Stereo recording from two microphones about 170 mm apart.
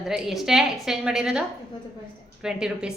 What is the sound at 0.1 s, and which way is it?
A woman's voice, 5° right (ahead or behind).